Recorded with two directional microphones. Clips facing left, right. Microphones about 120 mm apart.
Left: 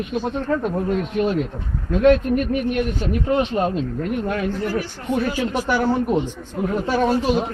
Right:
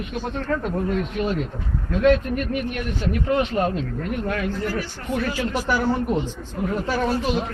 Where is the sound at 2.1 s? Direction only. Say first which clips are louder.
Left 3 dB; 40° left (ahead or behind).